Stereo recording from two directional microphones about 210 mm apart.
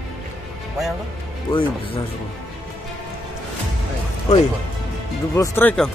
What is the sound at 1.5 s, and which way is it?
Speech, 25° left (ahead or behind).